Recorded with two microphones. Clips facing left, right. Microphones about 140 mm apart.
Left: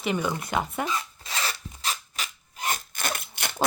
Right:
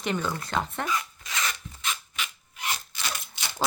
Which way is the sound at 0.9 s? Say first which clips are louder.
Even; 30° left (ahead or behind).